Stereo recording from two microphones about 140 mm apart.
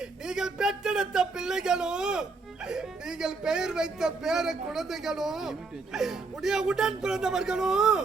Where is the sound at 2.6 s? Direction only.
5° right (ahead or behind).